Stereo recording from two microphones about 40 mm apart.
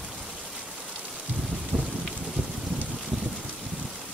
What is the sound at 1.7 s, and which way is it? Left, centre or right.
Rain, right.